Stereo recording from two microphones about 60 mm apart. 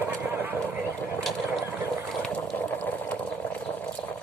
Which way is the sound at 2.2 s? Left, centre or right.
Left.